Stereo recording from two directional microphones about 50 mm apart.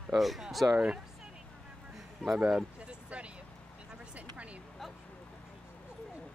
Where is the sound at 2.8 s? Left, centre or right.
Right.